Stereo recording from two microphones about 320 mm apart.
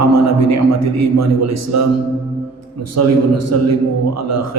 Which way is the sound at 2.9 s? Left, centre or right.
Right.